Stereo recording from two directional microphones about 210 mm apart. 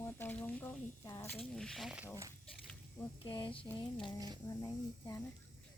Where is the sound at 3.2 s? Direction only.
20° left (ahead or behind).